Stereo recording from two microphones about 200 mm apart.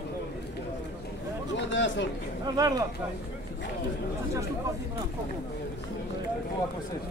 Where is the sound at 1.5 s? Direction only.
65° left (ahead or behind).